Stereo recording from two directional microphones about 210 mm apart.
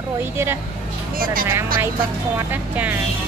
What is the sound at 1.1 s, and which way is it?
Speech, 45° right (ahead or behind).